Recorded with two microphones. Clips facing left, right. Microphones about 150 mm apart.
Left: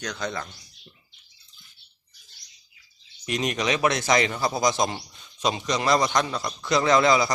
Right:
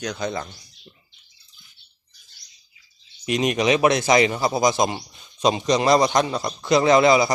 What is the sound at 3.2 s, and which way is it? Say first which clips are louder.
A man's voice: right 6 dB; 15° right (ahead or behind).